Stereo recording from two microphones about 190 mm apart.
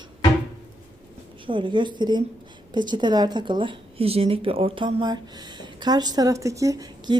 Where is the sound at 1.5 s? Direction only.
25° right (ahead or behind).